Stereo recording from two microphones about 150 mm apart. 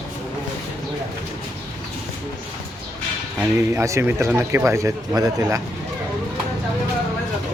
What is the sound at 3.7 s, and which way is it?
Speech, 20° right (ahead or behind).